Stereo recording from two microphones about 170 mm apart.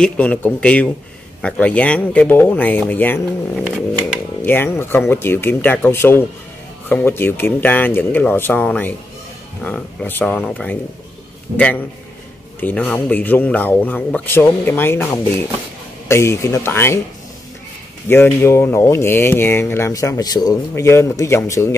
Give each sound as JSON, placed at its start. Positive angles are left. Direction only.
{"t": 0.0, "sound": "speech", "side_deg": 10}
{"t": 4.4, "sound": "speech", "side_deg": 10}
{"t": 18.0, "sound": "speech", "side_deg": 10}